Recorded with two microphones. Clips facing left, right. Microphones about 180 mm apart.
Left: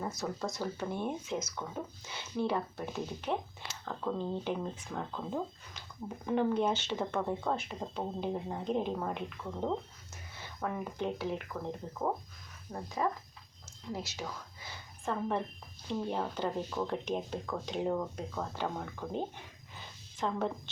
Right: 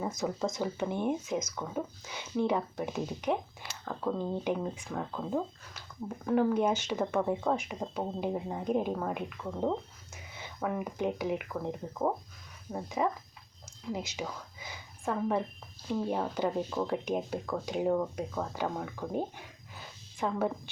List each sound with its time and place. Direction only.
0.2 s speech: 20° right (ahead or behind)
10.3 s a sound: 15° right (ahead or behind)
10.7 s speech: 5° right (ahead or behind)
13.9 s a woman's voice: 15° right (ahead or behind)